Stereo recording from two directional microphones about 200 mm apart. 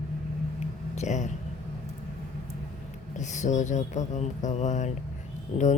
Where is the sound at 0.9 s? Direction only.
35° left (ahead or behind).